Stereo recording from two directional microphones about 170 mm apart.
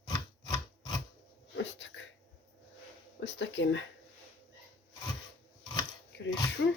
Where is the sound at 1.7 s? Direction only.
90° left.